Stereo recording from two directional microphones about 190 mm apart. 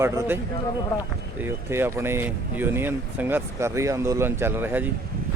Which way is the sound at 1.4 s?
10° right (ahead or behind).